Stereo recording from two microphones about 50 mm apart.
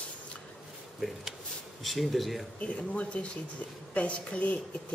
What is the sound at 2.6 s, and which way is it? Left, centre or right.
A woman's voice, left.